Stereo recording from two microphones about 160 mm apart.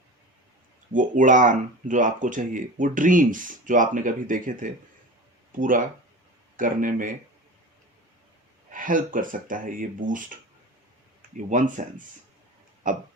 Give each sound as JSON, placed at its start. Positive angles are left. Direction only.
{"t": 0.9, "sound": "speech", "side_deg": -55}
{"t": 8.7, "sound": "speech", "side_deg": -55}
{"t": 11.3, "sound": "speech", "side_deg": -50}
{"t": 12.8, "sound": "speech", "side_deg": -55}